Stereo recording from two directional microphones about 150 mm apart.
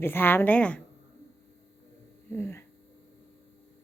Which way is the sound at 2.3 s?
15° left (ahead or behind).